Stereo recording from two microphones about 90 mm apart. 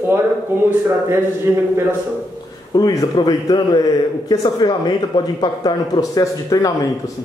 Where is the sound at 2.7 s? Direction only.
45° left (ahead or behind).